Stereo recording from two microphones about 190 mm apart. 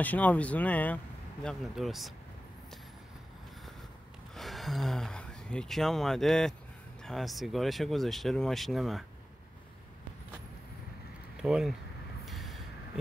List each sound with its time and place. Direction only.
0.0 s speech: 10° left (ahead or behind)
4.4 s speech: centre (ahead or behind)
11.4 s speech: centre (ahead or behind)
12.3 s vehicle: centre (ahead or behind)